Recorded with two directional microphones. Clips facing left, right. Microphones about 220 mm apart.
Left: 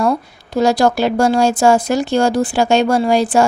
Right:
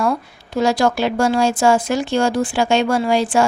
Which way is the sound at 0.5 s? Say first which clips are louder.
Left 3 dB; 40° left (ahead or behind).